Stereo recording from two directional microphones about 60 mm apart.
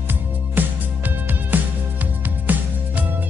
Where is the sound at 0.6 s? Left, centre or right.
Right.